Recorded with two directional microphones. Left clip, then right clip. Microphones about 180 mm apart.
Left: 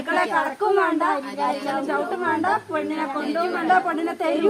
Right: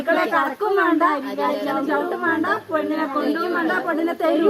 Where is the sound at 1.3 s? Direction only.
20° left (ahead or behind).